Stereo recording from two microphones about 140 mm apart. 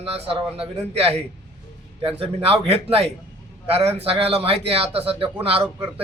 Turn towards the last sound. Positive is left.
turn(degrees=-45)  # may be behind; listen again after turning